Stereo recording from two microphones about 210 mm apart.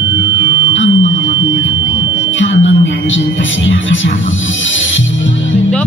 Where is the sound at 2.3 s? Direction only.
65° left (ahead or behind).